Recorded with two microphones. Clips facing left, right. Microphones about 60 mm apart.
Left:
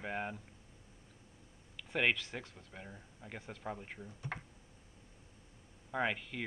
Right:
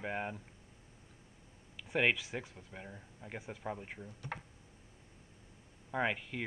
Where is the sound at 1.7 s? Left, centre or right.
Centre.